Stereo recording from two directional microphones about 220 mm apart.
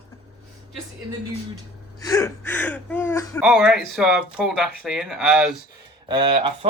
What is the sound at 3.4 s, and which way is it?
Speech, centre (ahead or behind).